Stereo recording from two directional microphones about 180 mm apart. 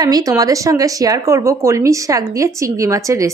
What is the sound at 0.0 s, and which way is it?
Speech, 20° right (ahead or behind).